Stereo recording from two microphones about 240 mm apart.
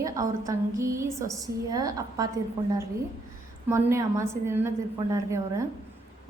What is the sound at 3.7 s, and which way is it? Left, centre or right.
A woman's voice, centre.